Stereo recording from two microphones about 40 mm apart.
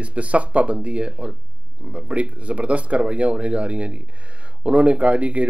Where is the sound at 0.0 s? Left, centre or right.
Right.